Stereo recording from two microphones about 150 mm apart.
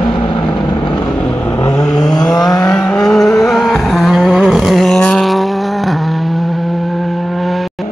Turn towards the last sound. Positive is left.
turn(degrees=0)  # may be behind; listen again after turning